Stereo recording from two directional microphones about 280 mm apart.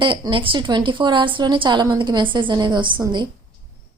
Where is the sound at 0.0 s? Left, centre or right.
Centre.